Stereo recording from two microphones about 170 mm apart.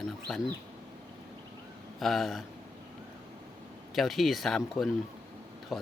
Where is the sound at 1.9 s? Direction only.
Centre (ahead or behind).